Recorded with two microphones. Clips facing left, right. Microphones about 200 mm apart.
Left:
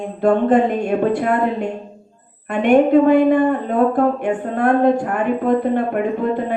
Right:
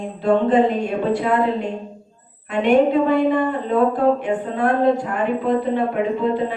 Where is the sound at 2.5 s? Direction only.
50° left (ahead or behind).